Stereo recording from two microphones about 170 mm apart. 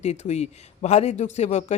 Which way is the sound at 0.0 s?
40° left (ahead or behind).